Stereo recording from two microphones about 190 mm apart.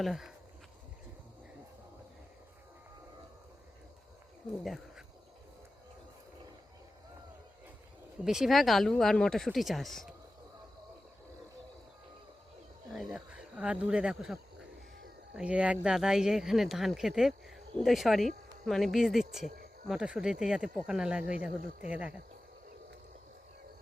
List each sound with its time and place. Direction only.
0.0 s speech: centre (ahead or behind)
4.6 s a sound: centre (ahead or behind)
8.2 s speech: 5° right (ahead or behind)
12.9 s speech: 5° right (ahead or behind)
15.4 s speech: 5° right (ahead or behind)